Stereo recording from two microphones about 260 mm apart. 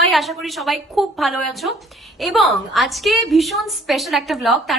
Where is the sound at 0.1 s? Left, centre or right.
Centre.